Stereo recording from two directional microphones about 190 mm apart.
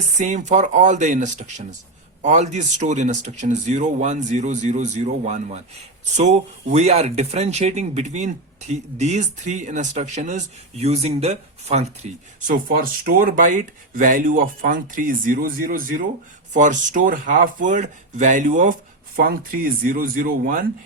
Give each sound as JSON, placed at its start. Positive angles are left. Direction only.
{"t": 0.2, "sound": "speech", "side_deg": -40}
{"t": 12.6, "sound": "speech", "side_deg": -50}